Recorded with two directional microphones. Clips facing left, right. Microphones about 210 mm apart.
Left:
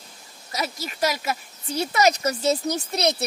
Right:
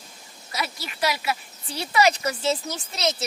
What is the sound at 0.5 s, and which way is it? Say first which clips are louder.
Speech: left 2 dB; 40° left (ahead or behind).